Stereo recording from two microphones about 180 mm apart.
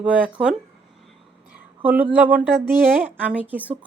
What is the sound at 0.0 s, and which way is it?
Speech, 5° right (ahead or behind).